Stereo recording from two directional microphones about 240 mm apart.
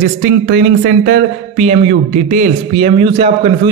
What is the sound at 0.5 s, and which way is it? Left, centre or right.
Speech, right.